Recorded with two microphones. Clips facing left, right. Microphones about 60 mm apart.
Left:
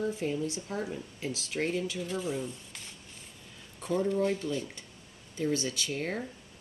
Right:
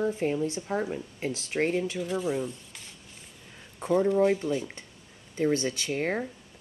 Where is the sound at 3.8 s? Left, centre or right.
Right.